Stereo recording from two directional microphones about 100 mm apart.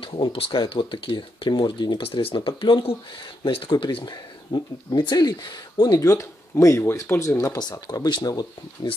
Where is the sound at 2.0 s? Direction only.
70° left (ahead or behind).